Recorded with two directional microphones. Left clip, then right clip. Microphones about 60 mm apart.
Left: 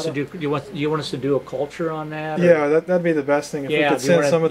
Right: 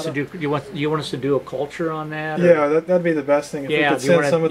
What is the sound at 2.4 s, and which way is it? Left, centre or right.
Speech, left.